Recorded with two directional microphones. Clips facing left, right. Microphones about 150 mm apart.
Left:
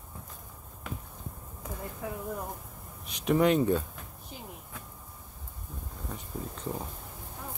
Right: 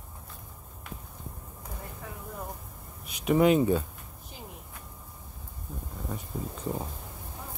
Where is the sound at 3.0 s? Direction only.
5° right (ahead or behind).